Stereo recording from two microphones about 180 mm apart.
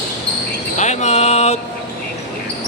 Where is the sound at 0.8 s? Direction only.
40° left (ahead or behind).